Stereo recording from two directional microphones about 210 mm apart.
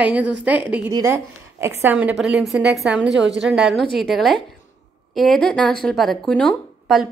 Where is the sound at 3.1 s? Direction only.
60° right (ahead or behind).